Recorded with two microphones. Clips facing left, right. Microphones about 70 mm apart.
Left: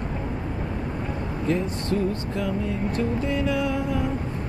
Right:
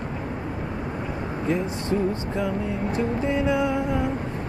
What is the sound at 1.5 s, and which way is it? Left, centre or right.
Speech, right.